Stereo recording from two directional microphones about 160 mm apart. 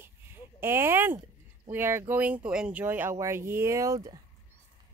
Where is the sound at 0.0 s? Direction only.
15° right (ahead or behind).